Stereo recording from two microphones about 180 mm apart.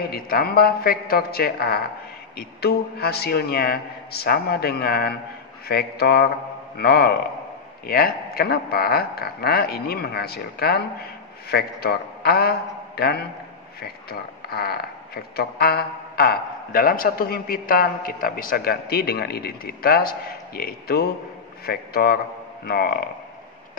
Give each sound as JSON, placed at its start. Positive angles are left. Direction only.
{"t": 0.1, "sound": "a man's voice", "side_deg": 60}